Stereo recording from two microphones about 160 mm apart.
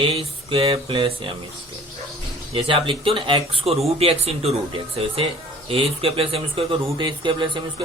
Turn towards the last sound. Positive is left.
turn(degrees=-30)  # may be behind; listen again after turning